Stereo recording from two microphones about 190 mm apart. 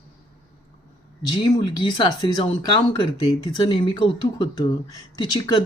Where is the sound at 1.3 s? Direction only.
20° left (ahead or behind).